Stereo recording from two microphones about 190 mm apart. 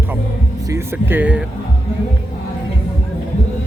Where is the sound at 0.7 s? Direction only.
10° right (ahead or behind).